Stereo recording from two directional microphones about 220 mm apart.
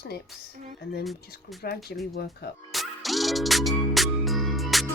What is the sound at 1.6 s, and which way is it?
Speech, 45° left (ahead or behind).